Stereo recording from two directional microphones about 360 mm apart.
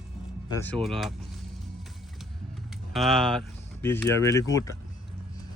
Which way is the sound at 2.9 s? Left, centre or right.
Centre.